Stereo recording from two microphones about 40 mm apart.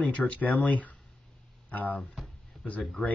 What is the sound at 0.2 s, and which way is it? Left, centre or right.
Speech, left.